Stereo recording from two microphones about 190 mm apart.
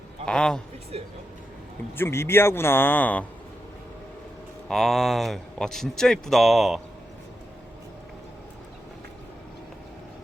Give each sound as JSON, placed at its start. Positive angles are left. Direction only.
{"t": 0.3, "sound": "a man's voice", "side_deg": 5}
{"t": 0.9, "sound": "speech", "side_deg": -30}
{"t": 2.0, "sound": "a man's voice", "side_deg": 15}
{"t": 4.7, "sound": "a man's voice", "side_deg": 0}